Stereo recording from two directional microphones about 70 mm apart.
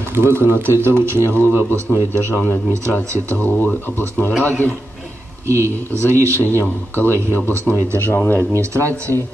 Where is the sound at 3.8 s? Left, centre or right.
Left.